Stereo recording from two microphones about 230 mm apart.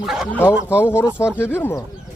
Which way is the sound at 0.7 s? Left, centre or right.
Centre.